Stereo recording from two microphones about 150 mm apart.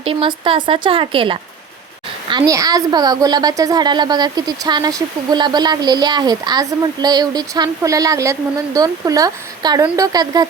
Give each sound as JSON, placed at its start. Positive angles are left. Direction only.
{"t": 0.0, "sound": "speech", "side_deg": -40}
{"t": 2.3, "sound": "a woman's voice", "side_deg": -25}